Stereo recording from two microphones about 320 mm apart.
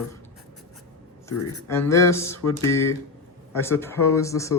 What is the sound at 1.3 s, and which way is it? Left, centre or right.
Speech, left.